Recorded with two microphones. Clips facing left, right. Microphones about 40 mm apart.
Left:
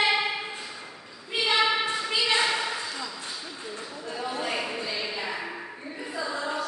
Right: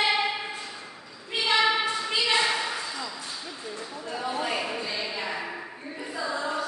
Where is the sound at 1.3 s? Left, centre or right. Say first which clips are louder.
Right 1 dB; centre.